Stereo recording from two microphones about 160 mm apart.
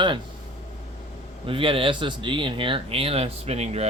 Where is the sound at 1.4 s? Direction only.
35° right (ahead or behind).